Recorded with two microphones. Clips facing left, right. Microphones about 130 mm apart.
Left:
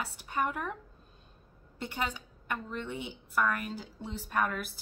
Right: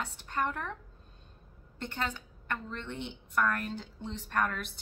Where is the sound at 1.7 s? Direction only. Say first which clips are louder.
Left 1 dB; 10° left (ahead or behind).